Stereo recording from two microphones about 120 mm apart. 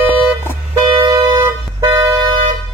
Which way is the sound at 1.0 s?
30° right (ahead or behind).